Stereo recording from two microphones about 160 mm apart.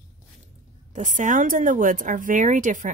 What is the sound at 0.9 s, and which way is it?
Speech, 50° right (ahead or behind).